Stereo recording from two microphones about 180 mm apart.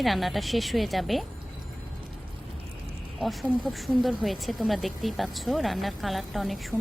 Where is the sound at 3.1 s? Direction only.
Centre (ahead or behind).